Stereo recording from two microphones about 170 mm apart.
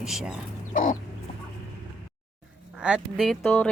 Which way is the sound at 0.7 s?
50° left (ahead or behind).